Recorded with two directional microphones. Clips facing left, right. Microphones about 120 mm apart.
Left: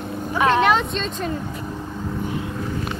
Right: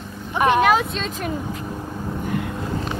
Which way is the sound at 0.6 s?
5° right (ahead or behind).